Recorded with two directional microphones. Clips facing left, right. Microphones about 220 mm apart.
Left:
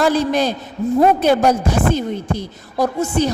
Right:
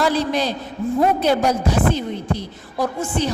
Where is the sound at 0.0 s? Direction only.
45° left (ahead or behind).